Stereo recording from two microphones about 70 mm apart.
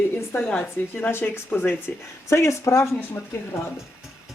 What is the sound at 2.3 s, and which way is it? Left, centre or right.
Speech, left.